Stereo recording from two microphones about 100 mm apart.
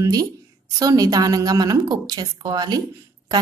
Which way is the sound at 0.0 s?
40° right (ahead or behind).